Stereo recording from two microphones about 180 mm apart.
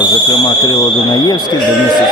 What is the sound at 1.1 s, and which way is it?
Speech, 25° left (ahead or behind).